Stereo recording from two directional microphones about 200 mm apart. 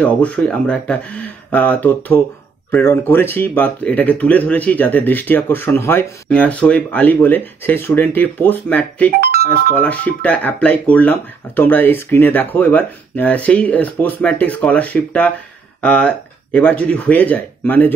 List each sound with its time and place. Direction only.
0.0 s speech: 5° left (ahead or behind)